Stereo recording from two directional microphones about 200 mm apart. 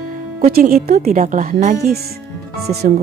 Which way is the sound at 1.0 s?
35° right (ahead or behind).